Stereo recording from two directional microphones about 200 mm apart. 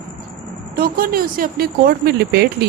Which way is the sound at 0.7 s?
45° right (ahead or behind).